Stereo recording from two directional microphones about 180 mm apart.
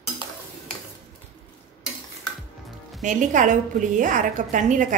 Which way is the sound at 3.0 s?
45° right (ahead or behind).